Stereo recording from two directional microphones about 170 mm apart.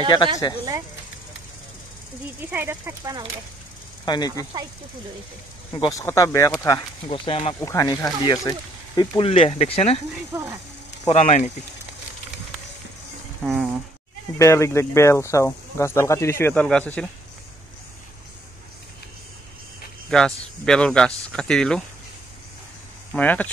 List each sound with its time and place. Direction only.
0.4 s speech: 25° left (ahead or behind)
2.5 s speech: 10° right (ahead or behind)
4.0 s speech: 25° left (ahead or behind)
4.5 s speech: 20° right (ahead or behind)
5.8 s speech: 20° left (ahead or behind)
7.1 s speech: 30° left (ahead or behind)
7.6 s speech: 20° left (ahead or behind)
9.2 s speech: 35° left (ahead or behind)
10.3 s speech: 15° right (ahead or behind)
11.1 s speech: 40° left (ahead or behind)
13.4 s speech: 5° right (ahead or behind)
14.4 s speech: 15° left (ahead or behind)
20.1 s speech: 5° left (ahead or behind)
23.1 s speech: 10° left (ahead or behind)